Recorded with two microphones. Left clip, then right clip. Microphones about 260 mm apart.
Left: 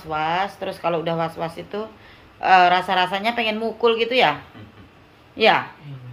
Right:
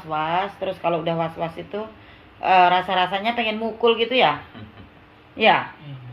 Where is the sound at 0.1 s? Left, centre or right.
Centre.